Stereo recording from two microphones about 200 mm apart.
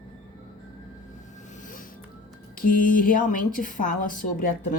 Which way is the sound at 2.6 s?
45° left (ahead or behind).